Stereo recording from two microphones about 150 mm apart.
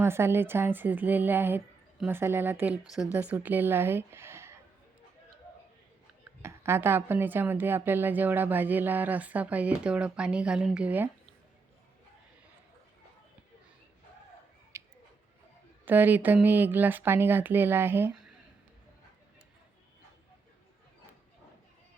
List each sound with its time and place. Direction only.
0.0 s a woman's voice: 15° right (ahead or behind)
6.4 s a woman's voice: 15° right (ahead or behind)
14.7 s tick-tock: 20° right (ahead or behind)
15.9 s a woman's voice: 10° right (ahead or behind)